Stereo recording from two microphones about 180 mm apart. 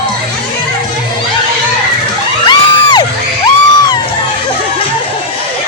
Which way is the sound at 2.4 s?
25° left (ahead or behind).